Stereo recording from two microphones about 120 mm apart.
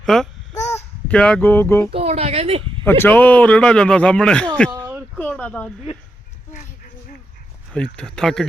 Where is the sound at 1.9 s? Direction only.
60° right (ahead or behind).